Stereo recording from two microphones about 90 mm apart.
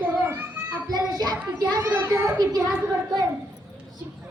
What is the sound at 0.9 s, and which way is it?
Child singing, 50° right (ahead or behind).